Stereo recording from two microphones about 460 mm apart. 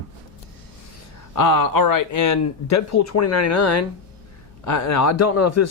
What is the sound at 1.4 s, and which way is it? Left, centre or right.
A man's voice, left.